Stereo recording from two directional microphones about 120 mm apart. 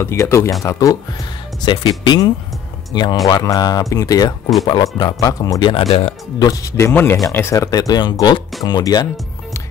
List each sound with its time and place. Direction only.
0.0 s speech: 25° left (ahead or behind)
1.6 s speech: 40° left (ahead or behind)
5.7 s speech: 55° left (ahead or behind)
6.4 s speech: 30° left (ahead or behind)
6.9 s speech: 20° left (ahead or behind); by 9.0 s 35° left (ahead or behind)